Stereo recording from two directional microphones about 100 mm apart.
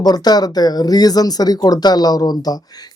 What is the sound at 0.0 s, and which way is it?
Speech, 40° left (ahead or behind).